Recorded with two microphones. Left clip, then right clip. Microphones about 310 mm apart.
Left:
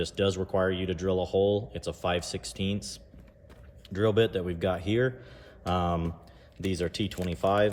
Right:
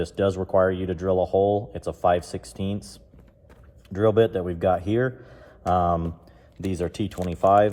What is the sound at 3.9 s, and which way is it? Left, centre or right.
Speech, centre.